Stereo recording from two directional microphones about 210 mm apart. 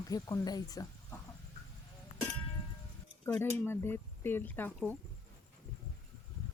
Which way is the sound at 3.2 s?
10° left (ahead or behind).